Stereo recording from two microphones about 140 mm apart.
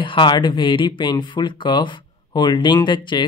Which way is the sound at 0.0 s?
35° left (ahead or behind).